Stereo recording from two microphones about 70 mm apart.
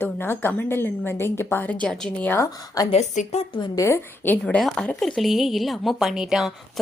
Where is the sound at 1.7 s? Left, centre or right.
Centre.